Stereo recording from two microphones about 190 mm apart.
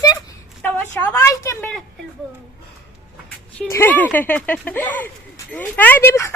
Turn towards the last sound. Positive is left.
turn(degrees=15)  # may be behind; listen again after turning